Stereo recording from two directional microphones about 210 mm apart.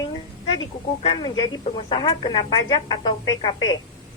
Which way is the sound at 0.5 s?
20° left (ahead or behind).